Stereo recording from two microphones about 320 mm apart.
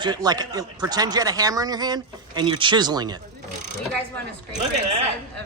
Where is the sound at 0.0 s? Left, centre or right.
Centre.